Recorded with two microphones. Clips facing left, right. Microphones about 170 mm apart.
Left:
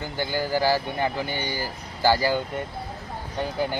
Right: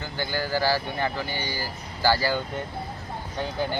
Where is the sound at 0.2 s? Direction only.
15° left (ahead or behind).